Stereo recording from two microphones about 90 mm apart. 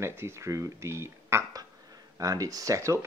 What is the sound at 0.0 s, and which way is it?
Speech, 30° right (ahead or behind).